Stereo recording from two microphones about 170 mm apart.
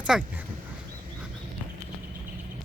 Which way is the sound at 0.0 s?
5° right (ahead or behind).